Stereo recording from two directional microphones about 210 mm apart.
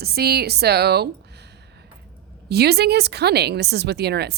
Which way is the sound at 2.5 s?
50° right (ahead or behind).